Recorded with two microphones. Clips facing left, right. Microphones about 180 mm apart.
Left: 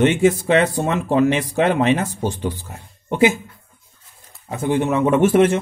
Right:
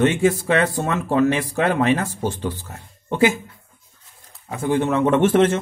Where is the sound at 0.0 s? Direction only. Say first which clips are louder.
Left 2 dB; 20° left (ahead or behind).